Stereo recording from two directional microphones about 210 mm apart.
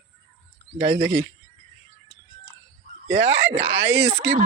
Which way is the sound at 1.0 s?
55° right (ahead or behind).